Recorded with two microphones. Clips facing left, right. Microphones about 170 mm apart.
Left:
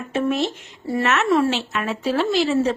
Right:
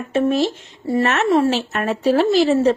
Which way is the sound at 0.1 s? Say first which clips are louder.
Right 4 dB; 30° right (ahead or behind).